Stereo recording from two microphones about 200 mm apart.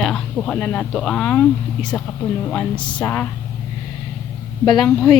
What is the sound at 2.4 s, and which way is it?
Speech, 5° left (ahead or behind).